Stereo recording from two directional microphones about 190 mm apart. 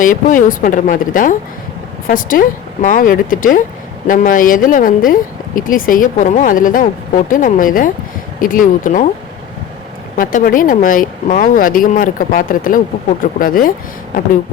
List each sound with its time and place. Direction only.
0.0 s speech: 45° left (ahead or behind)
10.2 s speech: 45° left (ahead or behind)